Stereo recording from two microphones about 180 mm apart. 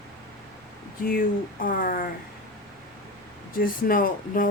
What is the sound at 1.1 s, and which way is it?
Speech, 50° left (ahead or behind).